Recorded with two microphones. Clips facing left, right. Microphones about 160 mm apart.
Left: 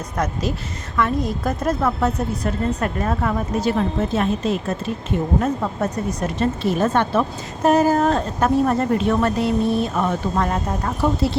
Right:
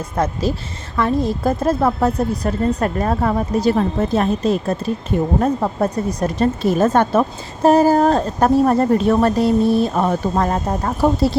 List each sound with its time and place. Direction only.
0.2 s speech: 30° right (ahead or behind)
7.6 s speech: 30° right (ahead or behind)